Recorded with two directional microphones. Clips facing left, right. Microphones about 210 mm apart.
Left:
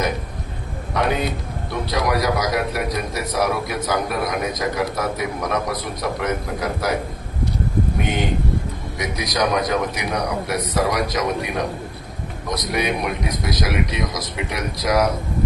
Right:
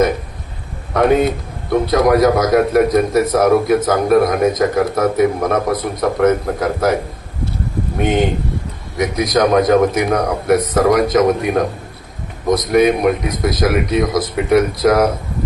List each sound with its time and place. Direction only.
0.9 s a man's voice: 50° right (ahead or behind)
9.0 s a man's voice: 50° right (ahead or behind)